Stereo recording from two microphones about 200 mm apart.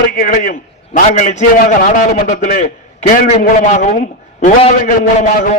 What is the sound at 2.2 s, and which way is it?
A man's voice, 40° left (ahead or behind).